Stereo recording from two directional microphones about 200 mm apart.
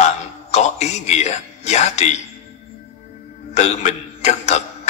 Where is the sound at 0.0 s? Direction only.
35° left (ahead or behind).